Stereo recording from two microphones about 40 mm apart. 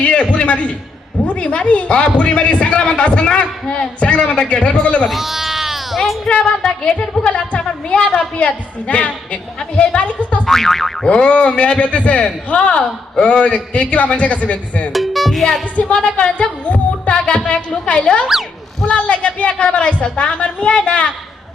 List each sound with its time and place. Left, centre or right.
0.4 s a man's voice: left
5.0 s speech: centre
6.2 s a man's voice: left
7.3 s a man's voice: left
10.4 s boing: centre
11.1 s a man's voice: left
14.9 s speech: centre
15.7 s a man's voice: left
18.3 s a sound: centre
18.9 s a man's voice: left